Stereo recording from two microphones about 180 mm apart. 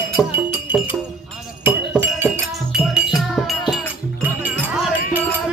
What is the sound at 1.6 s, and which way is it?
Chink, 10° right (ahead or behind).